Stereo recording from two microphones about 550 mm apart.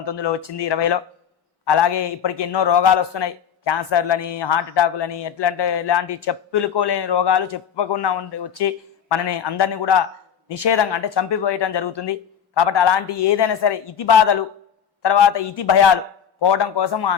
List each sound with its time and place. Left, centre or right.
0.0 s a man's voice: left